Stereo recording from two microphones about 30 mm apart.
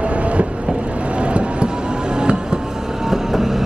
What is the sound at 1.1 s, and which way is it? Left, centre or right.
Vehicle, right.